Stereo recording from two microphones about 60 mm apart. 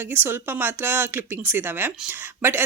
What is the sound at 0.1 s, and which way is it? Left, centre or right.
Speech, right.